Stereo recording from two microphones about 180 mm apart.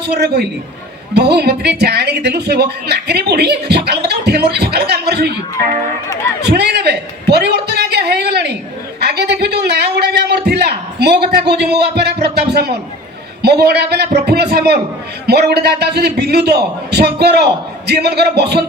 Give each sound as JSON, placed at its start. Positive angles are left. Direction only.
{"t": 0.0, "sound": "a woman's voice", "side_deg": -65}
{"t": 6.4, "sound": "a man's voice", "side_deg": -65}